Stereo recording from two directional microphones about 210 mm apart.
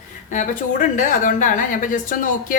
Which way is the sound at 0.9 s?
40° left (ahead or behind).